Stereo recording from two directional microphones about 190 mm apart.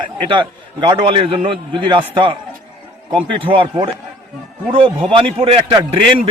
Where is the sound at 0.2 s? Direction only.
25° right (ahead or behind).